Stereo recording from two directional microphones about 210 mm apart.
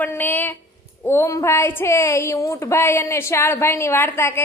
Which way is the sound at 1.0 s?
10° left (ahead or behind).